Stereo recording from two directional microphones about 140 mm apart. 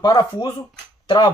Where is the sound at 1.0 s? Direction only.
35° left (ahead or behind).